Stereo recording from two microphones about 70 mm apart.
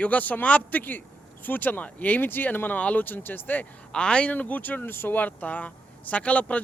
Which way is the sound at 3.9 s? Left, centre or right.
Centre.